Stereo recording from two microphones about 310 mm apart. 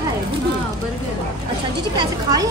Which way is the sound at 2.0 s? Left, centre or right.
Centre.